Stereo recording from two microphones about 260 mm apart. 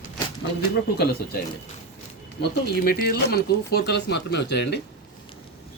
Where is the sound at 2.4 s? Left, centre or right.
Left.